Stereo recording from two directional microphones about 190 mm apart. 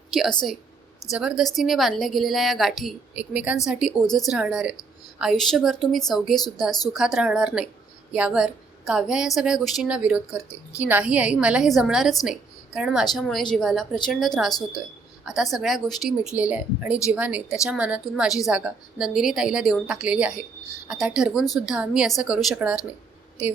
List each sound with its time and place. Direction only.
0.1 s a woman's voice: centre (ahead or behind)
6.7 s a woman's voice: 20° left (ahead or behind)
6.9 s a woman's voice: centre (ahead or behind)
14.8 s a sound: centre (ahead or behind)
15.5 s a woman's voice: centre (ahead or behind)